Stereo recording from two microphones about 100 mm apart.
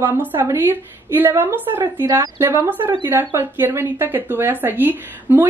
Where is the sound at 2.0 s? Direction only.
35° right (ahead or behind).